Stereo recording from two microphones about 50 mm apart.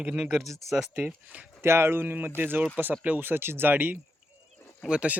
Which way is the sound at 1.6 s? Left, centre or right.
Right.